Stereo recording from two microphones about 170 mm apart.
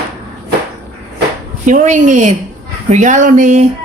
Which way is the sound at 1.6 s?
45° right (ahead or behind).